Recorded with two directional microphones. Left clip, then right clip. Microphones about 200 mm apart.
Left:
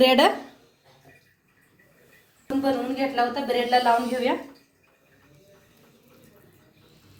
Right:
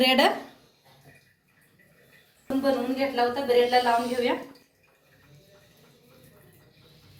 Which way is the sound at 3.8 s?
45° left (ahead or behind).